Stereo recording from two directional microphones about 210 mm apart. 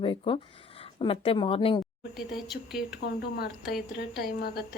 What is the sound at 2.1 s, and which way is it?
Speech, centre (ahead or behind).